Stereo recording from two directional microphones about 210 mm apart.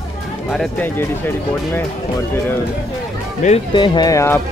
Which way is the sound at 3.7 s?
20° left (ahead or behind).